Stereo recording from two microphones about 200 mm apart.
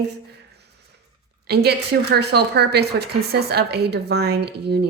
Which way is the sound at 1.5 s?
55° right (ahead or behind).